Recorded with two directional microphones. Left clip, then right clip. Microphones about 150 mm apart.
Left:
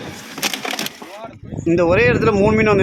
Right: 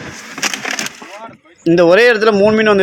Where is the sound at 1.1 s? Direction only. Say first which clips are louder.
Right 2 dB; 5° right (ahead or behind).